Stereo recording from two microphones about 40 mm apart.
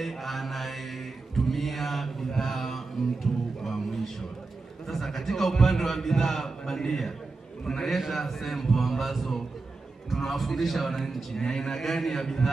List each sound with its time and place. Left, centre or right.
0.0 s a man's voice: centre
1.3 s mantra: centre
4.8 s a man's voice: centre